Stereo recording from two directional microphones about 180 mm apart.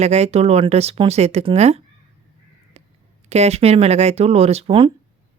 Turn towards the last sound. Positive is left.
turn(degrees=-30)  # may be behind; listen again after turning